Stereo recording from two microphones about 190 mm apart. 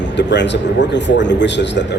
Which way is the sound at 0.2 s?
65° left (ahead or behind).